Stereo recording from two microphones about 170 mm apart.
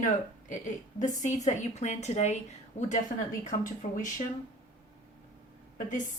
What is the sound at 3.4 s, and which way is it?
Speech, 50° left (ahead or behind).